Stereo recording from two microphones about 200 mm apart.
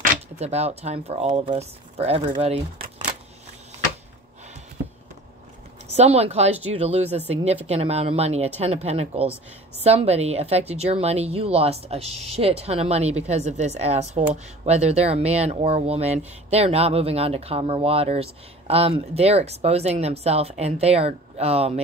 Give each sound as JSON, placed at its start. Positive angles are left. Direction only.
{"t": 0.0, "sound": "a woman's voice", "side_deg": -35}
{"t": 5.9, "sound": "a woman's voice", "side_deg": -30}